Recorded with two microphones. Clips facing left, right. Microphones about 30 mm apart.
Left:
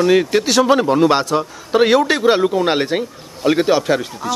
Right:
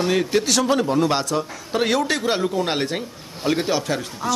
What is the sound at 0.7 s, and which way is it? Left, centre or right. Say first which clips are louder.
A man's voice: left 6 dB; left.